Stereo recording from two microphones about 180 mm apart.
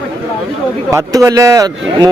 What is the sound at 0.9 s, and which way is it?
Speech, 20° right (ahead or behind).